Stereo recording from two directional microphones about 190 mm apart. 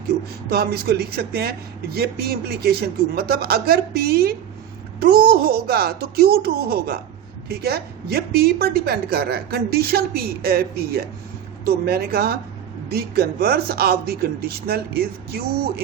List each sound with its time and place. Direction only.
0.5 s a man's voice: 55° right (ahead or behind)